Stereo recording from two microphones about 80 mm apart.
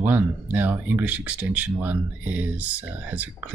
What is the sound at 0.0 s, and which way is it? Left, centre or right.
Speech, right.